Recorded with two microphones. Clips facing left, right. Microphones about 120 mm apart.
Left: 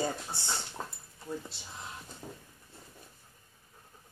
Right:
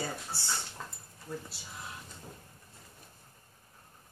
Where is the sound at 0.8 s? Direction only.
35° left (ahead or behind).